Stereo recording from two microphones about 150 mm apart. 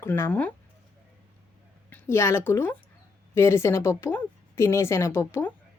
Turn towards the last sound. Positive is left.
turn(degrees=15)  # may be behind; listen again after turning